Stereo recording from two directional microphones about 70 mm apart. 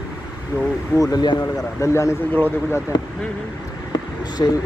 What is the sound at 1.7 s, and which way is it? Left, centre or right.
Speech, left.